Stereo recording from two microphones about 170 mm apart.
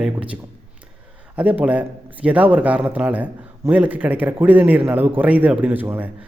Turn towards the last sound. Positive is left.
turn(degrees=-10)  # may be behind; listen again after turning